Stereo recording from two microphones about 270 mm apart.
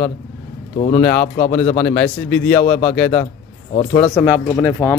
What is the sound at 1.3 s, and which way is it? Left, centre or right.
Speech, left.